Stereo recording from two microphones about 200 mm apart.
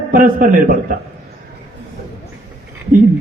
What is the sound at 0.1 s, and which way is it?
Speech, 45° right (ahead or behind).